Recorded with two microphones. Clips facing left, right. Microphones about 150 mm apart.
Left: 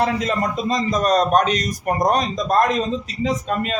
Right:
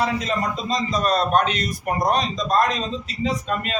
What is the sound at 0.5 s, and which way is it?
Speech, 50° left (ahead or behind).